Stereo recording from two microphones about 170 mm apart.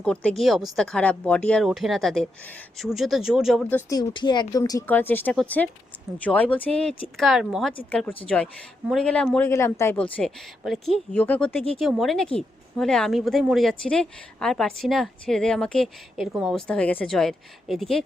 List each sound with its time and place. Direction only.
0.0 s a woman's voice: 5° left (ahead or behind)
3.7 s speech: 10° left (ahead or behind)
3.9 s a woman's voice: 25° left (ahead or behind)
4.9 s a woman's voice: 10° left (ahead or behind)
16.6 s a woman's voice: 10° left (ahead or behind)